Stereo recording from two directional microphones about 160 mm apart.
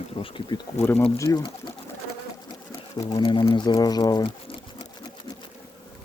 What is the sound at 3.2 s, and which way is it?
Speech, 25° left (ahead or behind).